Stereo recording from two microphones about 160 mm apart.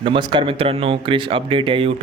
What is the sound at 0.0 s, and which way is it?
Speech, 30° right (ahead or behind).